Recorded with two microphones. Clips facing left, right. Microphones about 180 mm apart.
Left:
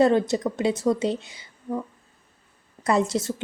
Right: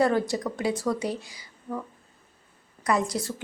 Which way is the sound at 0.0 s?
20° left (ahead or behind).